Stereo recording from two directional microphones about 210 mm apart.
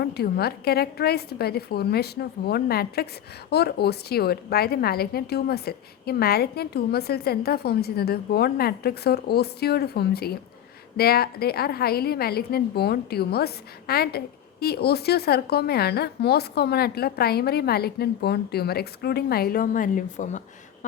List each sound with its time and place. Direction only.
0.0 s a woman's voice: 50° left (ahead or behind)